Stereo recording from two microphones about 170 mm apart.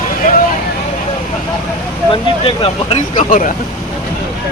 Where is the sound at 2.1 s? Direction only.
30° left (ahead or behind).